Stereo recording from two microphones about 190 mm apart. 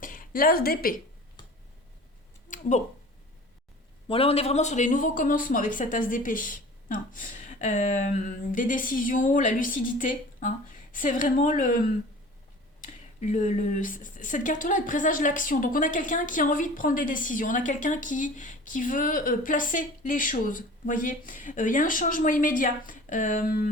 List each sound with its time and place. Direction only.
0.0 s speech: 45° left (ahead or behind)
2.5 s a sound: 40° left (ahead or behind)
4.1 s speech: 30° left (ahead or behind)
12.8 s speech: 40° left (ahead or behind)